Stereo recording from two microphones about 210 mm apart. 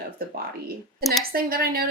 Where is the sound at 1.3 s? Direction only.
45° right (ahead or behind).